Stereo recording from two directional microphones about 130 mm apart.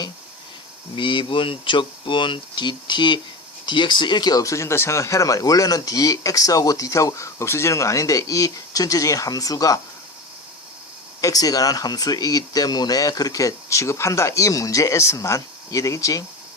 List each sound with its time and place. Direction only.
0.9 s speech: 40° left (ahead or behind)
11.2 s speech: 25° left (ahead or behind)